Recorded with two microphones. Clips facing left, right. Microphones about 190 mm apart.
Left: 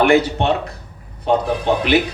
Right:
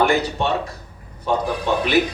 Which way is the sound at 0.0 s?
70° left (ahead or behind).